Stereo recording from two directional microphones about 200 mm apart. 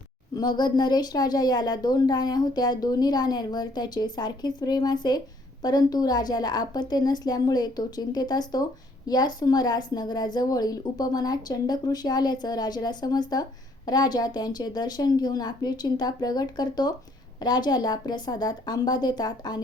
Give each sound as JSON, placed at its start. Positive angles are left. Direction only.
{"t": 0.3, "sound": "speech", "side_deg": 20}